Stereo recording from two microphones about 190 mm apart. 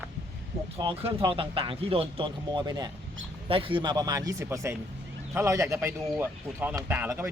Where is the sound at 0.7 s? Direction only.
30° right (ahead or behind).